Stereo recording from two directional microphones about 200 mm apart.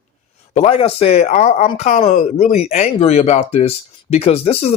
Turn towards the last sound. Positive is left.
turn(degrees=30)  # may be behind; listen again after turning